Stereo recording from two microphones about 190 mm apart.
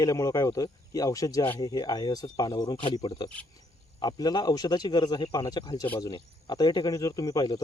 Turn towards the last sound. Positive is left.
turn(degrees=20)  # may be behind; listen again after turning